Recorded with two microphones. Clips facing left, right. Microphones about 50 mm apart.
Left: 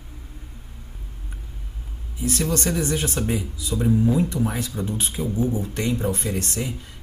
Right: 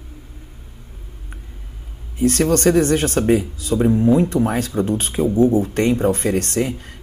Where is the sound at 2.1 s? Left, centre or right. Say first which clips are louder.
Right 8 dB; right.